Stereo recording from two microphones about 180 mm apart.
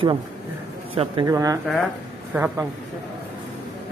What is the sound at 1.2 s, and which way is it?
A man's voice, 20° right (ahead or behind).